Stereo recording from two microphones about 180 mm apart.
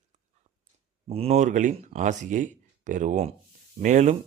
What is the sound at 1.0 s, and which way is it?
Speech, 35° right (ahead or behind).